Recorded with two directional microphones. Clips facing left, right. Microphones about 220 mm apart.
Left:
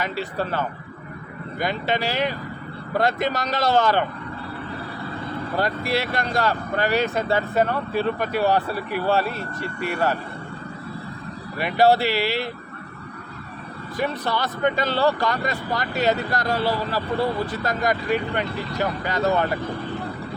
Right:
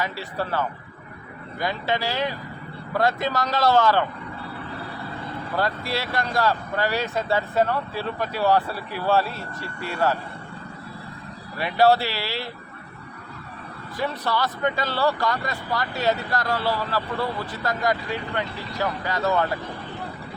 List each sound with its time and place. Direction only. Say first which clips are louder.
0.0 s speech: left 2 dB; 20° left (ahead or behind)
5.5 s speech: left 2 dB; 15° left (ahead or behind)
11.5 s speech: left 1 dB; 15° left (ahead or behind)
13.9 s speech: left 1 dB; 20° left (ahead or behind)